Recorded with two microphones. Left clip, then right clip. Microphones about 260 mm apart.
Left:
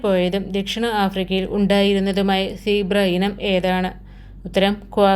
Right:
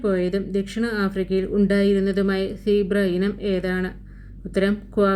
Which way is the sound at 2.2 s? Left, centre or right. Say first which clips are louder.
Left 3 dB; left.